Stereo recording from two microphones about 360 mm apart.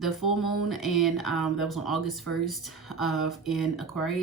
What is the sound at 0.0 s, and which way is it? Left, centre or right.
Speech, centre.